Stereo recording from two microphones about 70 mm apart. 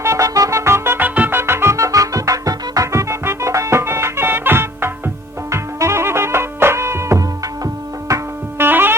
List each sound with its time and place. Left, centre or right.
0.0 s music: right
0.9 s music: right
1.4 s music: right
7.2 s music: right
8.5 s music: right